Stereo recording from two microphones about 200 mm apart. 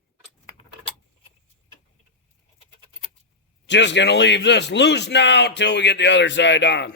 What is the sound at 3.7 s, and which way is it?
A man's voice, 60° left (ahead or behind).